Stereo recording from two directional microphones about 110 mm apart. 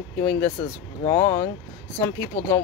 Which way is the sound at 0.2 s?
20° left (ahead or behind).